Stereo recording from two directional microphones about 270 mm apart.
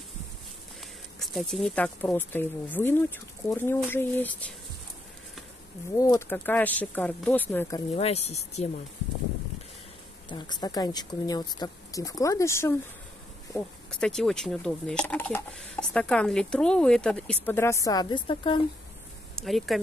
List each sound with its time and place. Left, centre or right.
1.2 s speech: centre
5.9 s speech: centre
7.9 s speech: left
10.2 s speech: centre
19.3 s speech: centre